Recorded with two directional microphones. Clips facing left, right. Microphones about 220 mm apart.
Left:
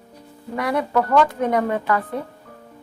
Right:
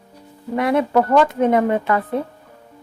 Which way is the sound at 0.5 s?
25° right (ahead or behind).